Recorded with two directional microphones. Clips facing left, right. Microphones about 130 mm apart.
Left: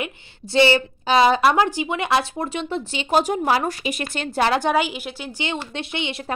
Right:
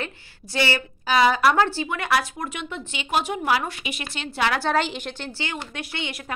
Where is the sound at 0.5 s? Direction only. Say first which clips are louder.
Left 8 dB; 25° left (ahead or behind); by 4.5 s 45° left (ahead or behind).